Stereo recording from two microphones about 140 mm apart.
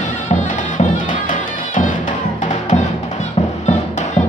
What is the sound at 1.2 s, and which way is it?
Music, 70° left (ahead or behind).